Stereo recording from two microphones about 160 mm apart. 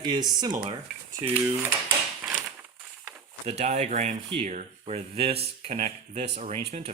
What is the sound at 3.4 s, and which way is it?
Speech, 45° right (ahead or behind).